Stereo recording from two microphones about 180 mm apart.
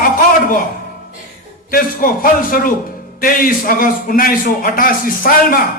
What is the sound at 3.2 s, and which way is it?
A man's voice, 50° left (ahead or behind).